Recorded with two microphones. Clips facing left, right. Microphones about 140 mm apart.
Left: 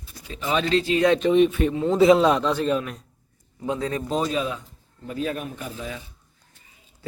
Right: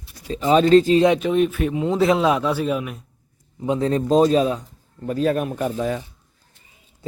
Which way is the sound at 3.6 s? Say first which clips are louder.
Right 6 dB; 20° right (ahead or behind).